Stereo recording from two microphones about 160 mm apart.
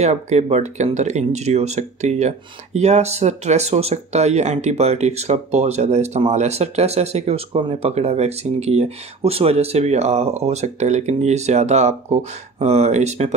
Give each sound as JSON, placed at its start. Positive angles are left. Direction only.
{"t": 0.0, "sound": "speech", "side_deg": -45}